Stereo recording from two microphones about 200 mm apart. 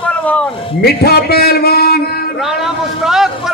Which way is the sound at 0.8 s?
50° left (ahead or behind).